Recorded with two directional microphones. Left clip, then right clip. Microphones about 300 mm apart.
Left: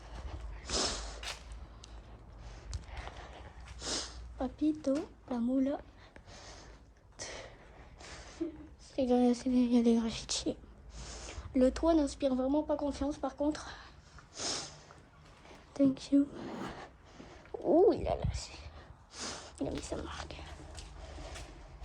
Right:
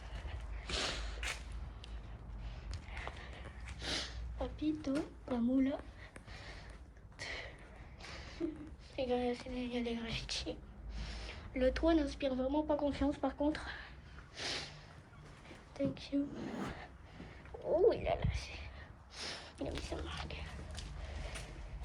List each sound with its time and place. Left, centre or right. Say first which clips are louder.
0.7 s snort: left 4 dB; centre
2.9 s sniff: even; centre
9.0 s a woman's voice: left 6 dB; left
14.3 s snort: left 3 dB; centre
15.7 s speech: left 9 dB; left